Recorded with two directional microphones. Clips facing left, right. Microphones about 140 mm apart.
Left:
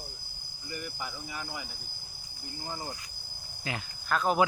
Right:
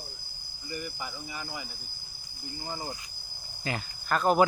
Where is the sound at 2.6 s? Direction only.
10° right (ahead or behind).